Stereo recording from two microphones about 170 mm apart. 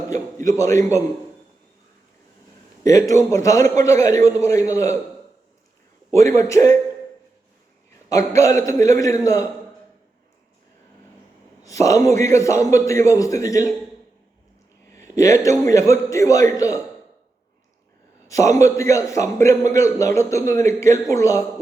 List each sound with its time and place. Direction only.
0.1 s a man's voice: 20° left (ahead or behind)
2.8 s a man's voice: 20° left (ahead or behind)
6.1 s a man's voice: 15° left (ahead or behind)
8.1 s a man's voice: 20° left (ahead or behind)
11.6 s a man's voice: 20° left (ahead or behind)
14.9 s a sound: 20° left (ahead or behind)
15.6 s a man's voice: 15° left (ahead or behind)
18.3 s a man's voice: 20° left (ahead or behind)